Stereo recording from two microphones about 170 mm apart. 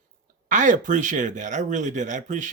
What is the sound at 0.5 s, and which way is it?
Speech, 50° right (ahead or behind).